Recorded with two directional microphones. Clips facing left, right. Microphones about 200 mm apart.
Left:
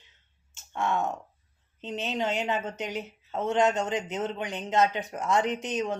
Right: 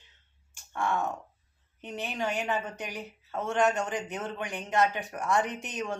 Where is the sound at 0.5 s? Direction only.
20° left (ahead or behind).